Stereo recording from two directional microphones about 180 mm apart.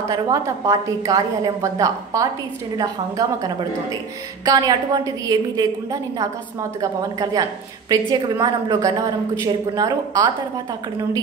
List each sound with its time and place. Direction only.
0.1 s a woman's voice: 20° right (ahead or behind)